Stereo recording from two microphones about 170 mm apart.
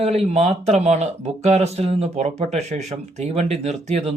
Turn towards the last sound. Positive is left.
turn(degrees=-40)  # may be behind; listen again after turning